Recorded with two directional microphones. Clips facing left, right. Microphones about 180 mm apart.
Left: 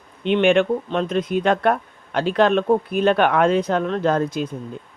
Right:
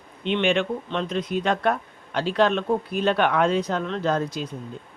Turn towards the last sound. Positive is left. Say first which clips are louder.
# left 4 dB
turn(degrees=55)  # may be behind; listen again after turning